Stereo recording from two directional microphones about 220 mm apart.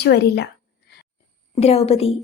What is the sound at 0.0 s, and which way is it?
Speech, 50° left (ahead or behind).